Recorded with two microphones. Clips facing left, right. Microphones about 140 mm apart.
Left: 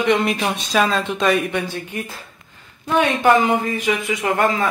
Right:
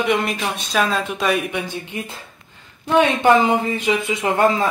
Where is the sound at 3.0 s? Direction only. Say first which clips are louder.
Right 1 dB; 30° right (ahead or behind).